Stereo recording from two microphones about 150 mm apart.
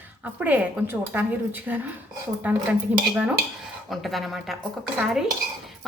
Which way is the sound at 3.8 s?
Centre (ahead or behind).